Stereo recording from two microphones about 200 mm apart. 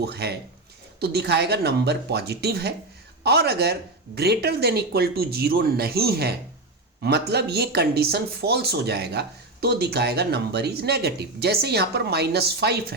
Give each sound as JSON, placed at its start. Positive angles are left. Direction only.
{"t": 0.0, "sound": "speech", "side_deg": -55}